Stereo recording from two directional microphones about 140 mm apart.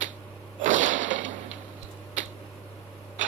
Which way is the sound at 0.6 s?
60° right (ahead or behind).